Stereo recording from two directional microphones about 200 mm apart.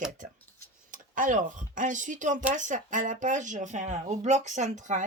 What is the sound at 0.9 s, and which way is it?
Speech, 40° right (ahead or behind).